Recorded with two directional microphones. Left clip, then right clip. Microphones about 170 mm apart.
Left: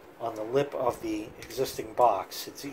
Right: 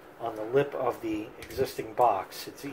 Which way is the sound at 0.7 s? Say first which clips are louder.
Left 1 dB; 15° left (ahead or behind).